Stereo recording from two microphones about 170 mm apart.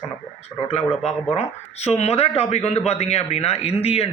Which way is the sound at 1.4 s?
40° left (ahead or behind).